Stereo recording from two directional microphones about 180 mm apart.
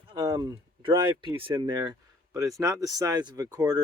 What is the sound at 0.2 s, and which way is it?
Speech, 20° right (ahead or behind).